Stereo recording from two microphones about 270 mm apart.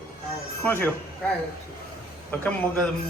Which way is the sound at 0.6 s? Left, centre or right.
Centre.